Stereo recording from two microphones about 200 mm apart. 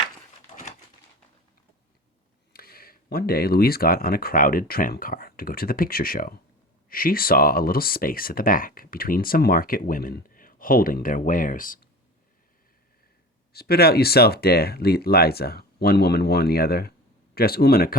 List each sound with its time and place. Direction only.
2.5 s speech: 50° left (ahead or behind)
13.5 s speech: 50° left (ahead or behind)